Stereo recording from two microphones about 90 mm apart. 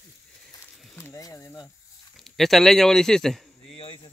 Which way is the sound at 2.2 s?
Centre (ahead or behind).